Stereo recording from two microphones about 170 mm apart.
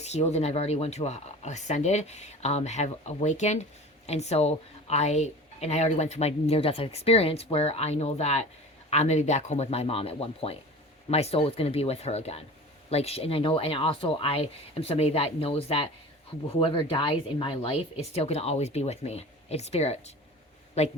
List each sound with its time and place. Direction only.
0.0 s speech: 40° left (ahead or behind)